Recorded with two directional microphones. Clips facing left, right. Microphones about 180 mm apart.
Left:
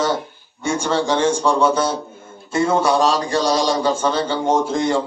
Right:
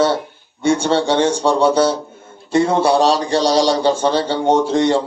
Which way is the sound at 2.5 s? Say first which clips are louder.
Right 3 dB; 30° right (ahead or behind).